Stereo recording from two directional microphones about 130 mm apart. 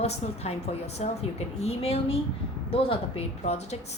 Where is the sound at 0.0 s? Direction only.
55° left (ahead or behind).